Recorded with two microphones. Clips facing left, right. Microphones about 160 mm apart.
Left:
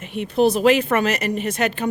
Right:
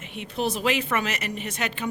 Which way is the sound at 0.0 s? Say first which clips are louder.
Left 10 dB; 45° left (ahead or behind).